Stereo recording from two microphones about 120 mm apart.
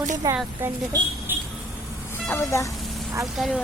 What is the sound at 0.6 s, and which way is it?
Speech, 15° right (ahead or behind).